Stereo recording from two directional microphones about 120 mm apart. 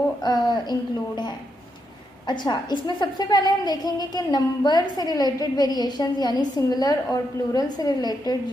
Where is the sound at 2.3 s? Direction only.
40° left (ahead or behind).